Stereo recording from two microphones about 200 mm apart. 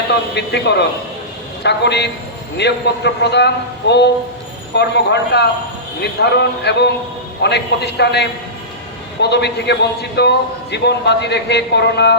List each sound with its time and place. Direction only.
0.1 s a man's voice: 60° left (ahead or behind)